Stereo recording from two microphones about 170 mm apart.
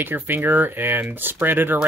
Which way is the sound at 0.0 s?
10° right (ahead or behind).